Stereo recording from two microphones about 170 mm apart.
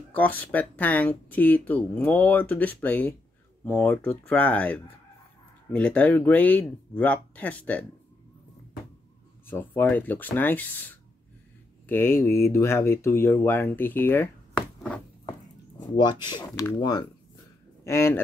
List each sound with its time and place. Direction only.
0.1 s speech: 10° left (ahead or behind)
9.5 s speech: 10° left (ahead or behind)
15.8 s speech: 25° left (ahead or behind)
17.8 s speech: 15° left (ahead or behind)